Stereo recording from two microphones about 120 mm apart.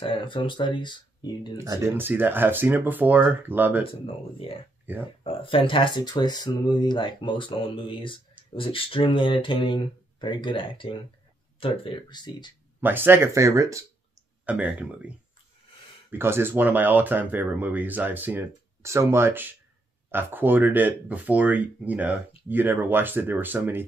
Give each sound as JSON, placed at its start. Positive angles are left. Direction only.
{"t": 0.0, "sound": "speech", "side_deg": 45}
{"t": 1.6, "sound": "speech", "side_deg": -25}
{"t": 3.8, "sound": "speech", "side_deg": 50}
{"t": 4.9, "sound": "speech", "side_deg": -15}
{"t": 5.2, "sound": "speech", "side_deg": 45}
{"t": 12.8, "sound": "speech", "side_deg": -15}
{"t": 14.4, "sound": "speech", "side_deg": -10}